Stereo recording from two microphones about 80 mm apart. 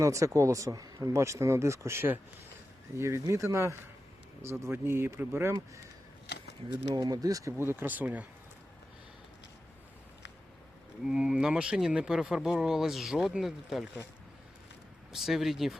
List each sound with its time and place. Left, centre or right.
0.0 s speech: right
1.1 s speech: right
6.9 s speech: right
7.6 s speech: right
11.0 s speech: centre
15.1 s speech: centre